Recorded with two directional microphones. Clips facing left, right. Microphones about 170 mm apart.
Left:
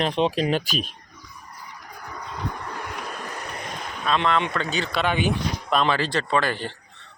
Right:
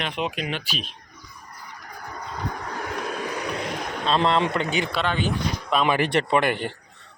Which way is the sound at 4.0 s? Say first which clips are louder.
Right 1 dB; 30° right (ahead or behind).